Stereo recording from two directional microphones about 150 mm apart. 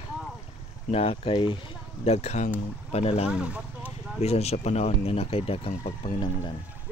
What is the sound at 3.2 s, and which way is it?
Speech, 5° right (ahead or behind).